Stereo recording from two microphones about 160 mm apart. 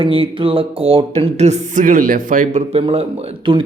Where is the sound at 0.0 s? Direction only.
35° right (ahead or behind).